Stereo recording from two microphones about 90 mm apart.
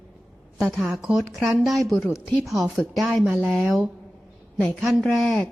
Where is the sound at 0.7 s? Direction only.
5° right (ahead or behind).